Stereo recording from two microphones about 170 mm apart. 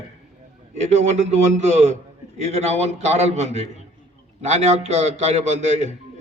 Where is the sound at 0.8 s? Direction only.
40° right (ahead or behind).